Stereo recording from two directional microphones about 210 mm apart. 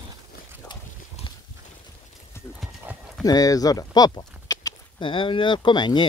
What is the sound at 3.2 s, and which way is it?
Speech, 15° left (ahead or behind).